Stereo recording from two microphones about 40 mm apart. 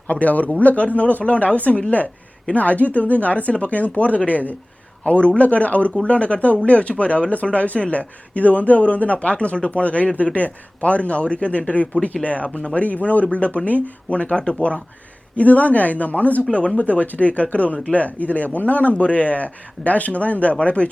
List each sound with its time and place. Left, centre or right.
0.1 s speech: left
15.4 s speech: left